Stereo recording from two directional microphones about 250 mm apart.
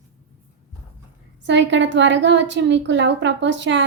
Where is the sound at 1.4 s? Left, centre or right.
Right.